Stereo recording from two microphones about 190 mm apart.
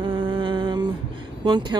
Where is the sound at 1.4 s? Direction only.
25° right (ahead or behind).